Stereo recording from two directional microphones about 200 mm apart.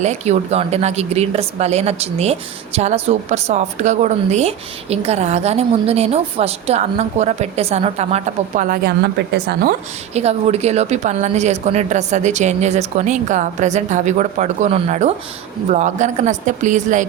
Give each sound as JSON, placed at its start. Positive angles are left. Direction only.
{"t": 0.0, "sound": "speech", "side_deg": -35}
{"t": 10.2, "sound": "speech", "side_deg": -30}